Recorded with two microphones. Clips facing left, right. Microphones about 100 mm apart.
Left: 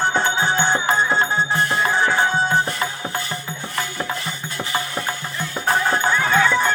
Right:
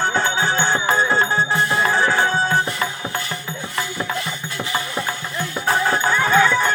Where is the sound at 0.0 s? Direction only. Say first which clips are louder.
Even; 20° left (ahead or behind).